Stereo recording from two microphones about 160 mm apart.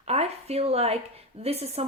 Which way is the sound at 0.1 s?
40° right (ahead or behind).